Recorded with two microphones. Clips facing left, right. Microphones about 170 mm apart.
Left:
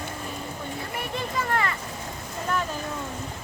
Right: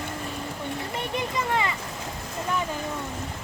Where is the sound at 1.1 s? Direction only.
15° right (ahead or behind).